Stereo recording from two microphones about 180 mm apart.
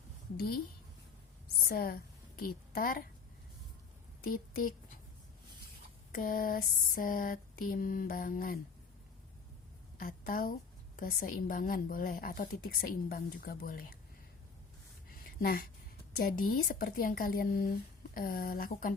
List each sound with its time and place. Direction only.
0.3 s a woman's voice: 60° left (ahead or behind)
1.7 s a woman's voice: 55° left (ahead or behind)
4.2 s a woman's voice: 50° left (ahead or behind)
6.1 s a woman's voice: 50° left (ahead or behind)
10.0 s a woman's voice: 50° left (ahead or behind)
15.1 s a sound: 55° left (ahead or behind)
16.1 s a woman's voice: 50° left (ahead or behind)